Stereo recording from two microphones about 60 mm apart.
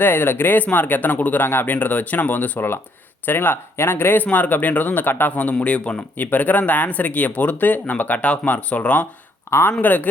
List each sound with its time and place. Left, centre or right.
0.0 s speech: left
5.3 s speech: left
9.5 s speech: left
9.8 s speech: left